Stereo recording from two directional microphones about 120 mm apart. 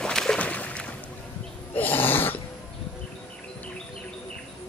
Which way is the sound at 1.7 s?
15° left (ahead or behind).